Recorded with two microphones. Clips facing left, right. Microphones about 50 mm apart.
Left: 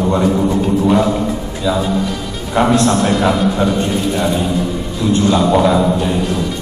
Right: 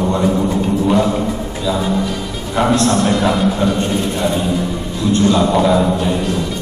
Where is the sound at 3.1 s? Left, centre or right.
Centre.